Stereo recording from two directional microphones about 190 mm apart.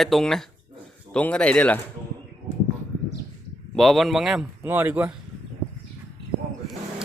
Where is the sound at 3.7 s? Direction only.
Centre (ahead or behind).